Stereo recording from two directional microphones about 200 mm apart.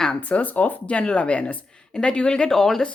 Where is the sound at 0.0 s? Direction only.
5° left (ahead or behind).